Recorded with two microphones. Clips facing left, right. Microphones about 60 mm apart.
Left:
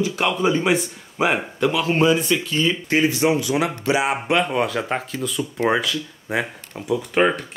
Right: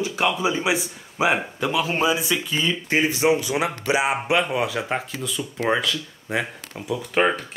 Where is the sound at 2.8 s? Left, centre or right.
Centre.